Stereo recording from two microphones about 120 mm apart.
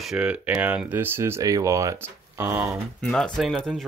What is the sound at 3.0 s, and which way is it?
Speech, 10° left (ahead or behind).